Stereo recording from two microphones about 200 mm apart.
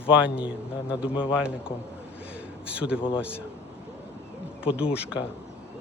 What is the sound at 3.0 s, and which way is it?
Speech, 25° left (ahead or behind).